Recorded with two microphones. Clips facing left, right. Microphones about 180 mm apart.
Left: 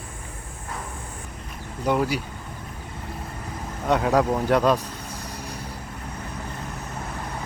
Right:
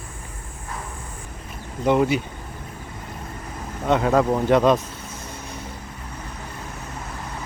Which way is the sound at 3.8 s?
5° left (ahead or behind).